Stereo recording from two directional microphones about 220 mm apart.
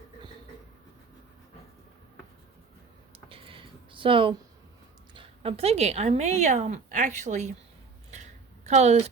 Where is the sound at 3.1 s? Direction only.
25° right (ahead or behind).